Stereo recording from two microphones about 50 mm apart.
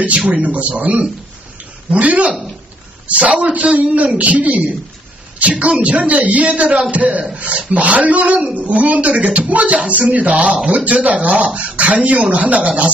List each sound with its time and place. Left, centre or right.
0.4 s speech: right